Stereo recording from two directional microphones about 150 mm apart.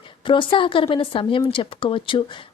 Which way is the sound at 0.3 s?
35° left (ahead or behind).